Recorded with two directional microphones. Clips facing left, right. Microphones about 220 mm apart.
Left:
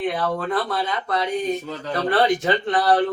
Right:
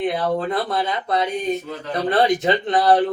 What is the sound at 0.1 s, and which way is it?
Speech, 25° right (ahead or behind).